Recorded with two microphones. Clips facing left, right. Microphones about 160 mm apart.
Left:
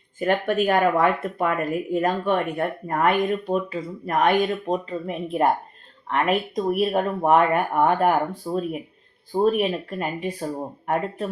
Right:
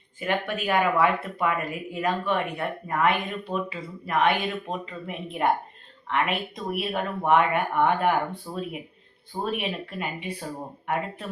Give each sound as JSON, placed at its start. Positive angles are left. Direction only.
{"t": 0.2, "sound": "speech", "side_deg": 45}
{"t": 8.4, "sound": "speech", "side_deg": 25}
{"t": 9.4, "sound": "speech", "side_deg": 40}